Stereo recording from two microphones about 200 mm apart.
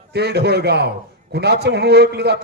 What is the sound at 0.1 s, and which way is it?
A man's voice, 55° right (ahead or behind).